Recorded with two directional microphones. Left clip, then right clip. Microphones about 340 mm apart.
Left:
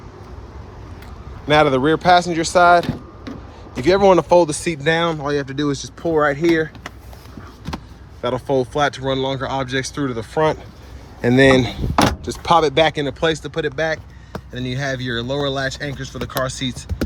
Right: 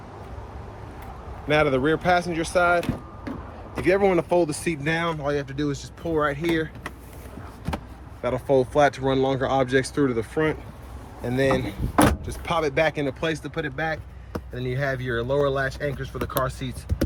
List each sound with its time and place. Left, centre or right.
1.5 s speech: centre
8.2 s speech: centre